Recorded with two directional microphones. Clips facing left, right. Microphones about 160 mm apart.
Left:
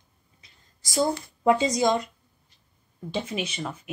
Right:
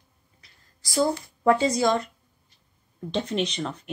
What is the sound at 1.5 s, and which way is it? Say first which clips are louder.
Speech: right 1 dB; 15° left (ahead or behind).